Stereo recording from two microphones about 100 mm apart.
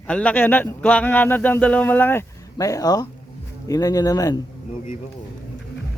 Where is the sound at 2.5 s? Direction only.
35° left (ahead or behind).